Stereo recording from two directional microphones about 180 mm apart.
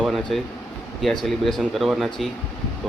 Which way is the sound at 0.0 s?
Centre (ahead or behind).